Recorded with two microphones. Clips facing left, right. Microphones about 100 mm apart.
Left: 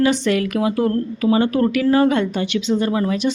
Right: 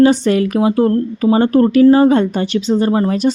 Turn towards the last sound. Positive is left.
turn(degrees=-40)  # may be behind; listen again after turning